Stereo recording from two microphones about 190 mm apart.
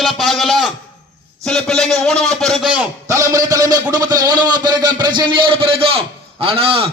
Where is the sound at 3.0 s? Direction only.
15° right (ahead or behind).